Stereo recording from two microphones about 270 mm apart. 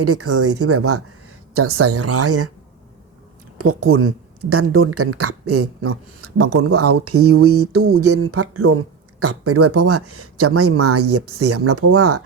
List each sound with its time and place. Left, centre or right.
0.0 s speech: right
3.8 s speech: right